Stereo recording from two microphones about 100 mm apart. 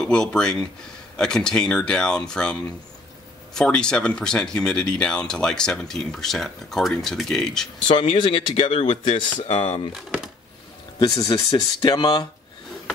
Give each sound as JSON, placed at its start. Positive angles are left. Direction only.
{"t": 0.0, "sound": "speech", "side_deg": 5}
{"t": 7.8, "sound": "speech", "side_deg": 65}
{"t": 9.9, "sound": "speech", "side_deg": -5}
{"t": 11.1, "sound": "speech", "side_deg": 60}